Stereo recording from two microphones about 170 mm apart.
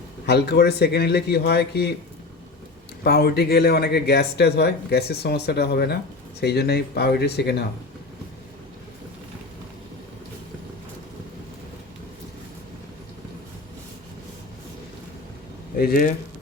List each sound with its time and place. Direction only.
0.3 s speech: 75° left (ahead or behind)
3.0 s speech: 65° left (ahead or behind)
15.8 s speech: 60° left (ahead or behind)